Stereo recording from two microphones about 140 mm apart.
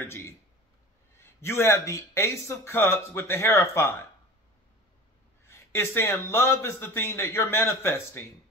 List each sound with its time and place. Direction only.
0.0 s speech: 15° left (ahead or behind)
5.5 s a man's voice: 20° left (ahead or behind)